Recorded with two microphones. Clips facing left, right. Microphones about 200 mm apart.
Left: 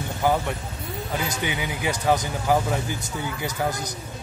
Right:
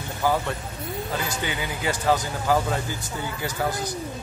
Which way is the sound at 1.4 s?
15° left (ahead or behind).